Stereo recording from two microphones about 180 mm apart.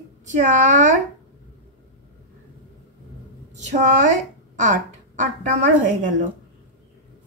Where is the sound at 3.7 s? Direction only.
40° right (ahead or behind).